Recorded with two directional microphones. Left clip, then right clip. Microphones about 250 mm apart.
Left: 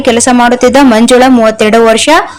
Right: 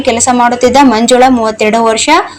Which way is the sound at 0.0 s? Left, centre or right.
Left.